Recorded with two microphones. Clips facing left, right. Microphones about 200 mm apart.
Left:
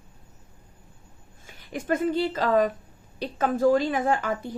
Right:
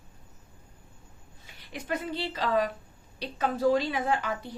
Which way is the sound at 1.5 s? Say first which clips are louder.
Left 7 dB; 50° left (ahead or behind).